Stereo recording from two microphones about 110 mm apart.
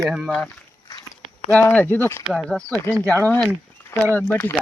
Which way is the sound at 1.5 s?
15° left (ahead or behind).